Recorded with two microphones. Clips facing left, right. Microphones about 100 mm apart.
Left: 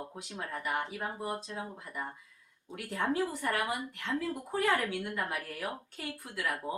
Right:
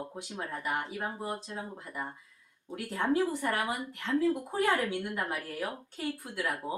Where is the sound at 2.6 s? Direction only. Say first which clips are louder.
Right 3 dB; 25° right (ahead or behind).